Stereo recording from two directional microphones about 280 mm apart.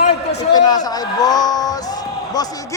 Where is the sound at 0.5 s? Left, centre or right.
Centre.